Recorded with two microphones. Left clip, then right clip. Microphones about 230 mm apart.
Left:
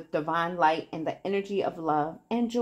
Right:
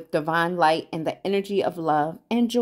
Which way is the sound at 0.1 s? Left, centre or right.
Right.